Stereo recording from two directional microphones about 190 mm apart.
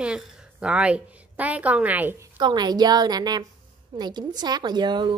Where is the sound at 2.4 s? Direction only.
20° right (ahead or behind).